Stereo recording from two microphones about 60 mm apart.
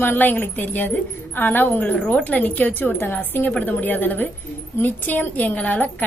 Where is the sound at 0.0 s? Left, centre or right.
Left.